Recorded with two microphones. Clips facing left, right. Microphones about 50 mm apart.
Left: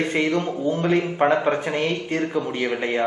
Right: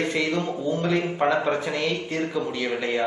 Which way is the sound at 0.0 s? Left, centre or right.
Left.